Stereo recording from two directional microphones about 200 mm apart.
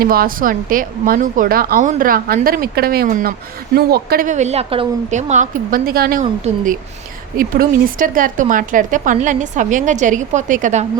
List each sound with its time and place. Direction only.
0.0 s speech: 45° right (ahead or behind)
6.5 s speech: 35° right (ahead or behind)
7.3 s speech: 45° right (ahead or behind)